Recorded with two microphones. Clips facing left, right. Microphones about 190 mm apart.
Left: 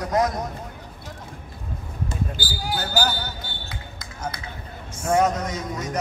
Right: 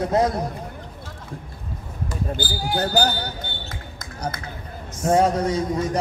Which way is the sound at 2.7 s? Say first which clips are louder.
Right 4 dB; 35° right (ahead or behind).